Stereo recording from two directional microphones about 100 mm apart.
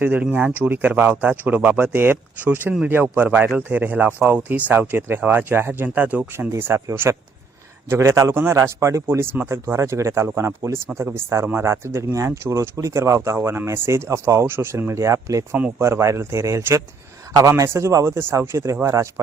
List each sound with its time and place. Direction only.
0.0 s speech: 15° right (ahead or behind); by 15.4 s 30° right (ahead or behind)
15.5 s speech: 20° right (ahead or behind)